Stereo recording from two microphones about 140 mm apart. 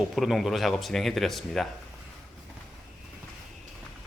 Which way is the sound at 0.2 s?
Centre (ahead or behind).